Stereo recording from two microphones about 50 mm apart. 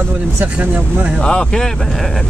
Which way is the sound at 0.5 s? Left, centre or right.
Right.